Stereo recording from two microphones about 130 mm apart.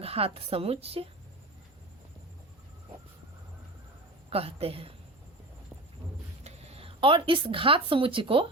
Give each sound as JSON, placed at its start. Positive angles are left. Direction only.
{"t": 0.0, "sound": "a woman's voice", "side_deg": -50}
{"t": 4.3, "sound": "a woman's voice", "side_deg": -50}
{"t": 6.4, "sound": "speech", "side_deg": -50}